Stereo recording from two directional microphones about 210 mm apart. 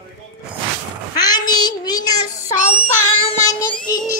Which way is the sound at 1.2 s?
20° left (ahead or behind).